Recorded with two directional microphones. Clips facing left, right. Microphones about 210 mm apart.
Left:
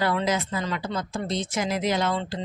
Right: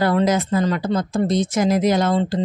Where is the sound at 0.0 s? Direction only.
45° right (ahead or behind).